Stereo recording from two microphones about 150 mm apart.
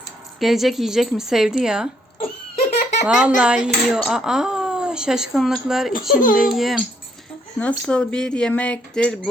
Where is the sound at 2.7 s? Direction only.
50° left (ahead or behind).